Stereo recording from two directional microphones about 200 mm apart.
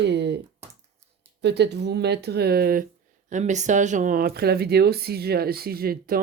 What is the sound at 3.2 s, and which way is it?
Speech, 35° right (ahead or behind).